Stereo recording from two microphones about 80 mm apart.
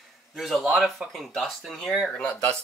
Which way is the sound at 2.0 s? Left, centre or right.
Centre.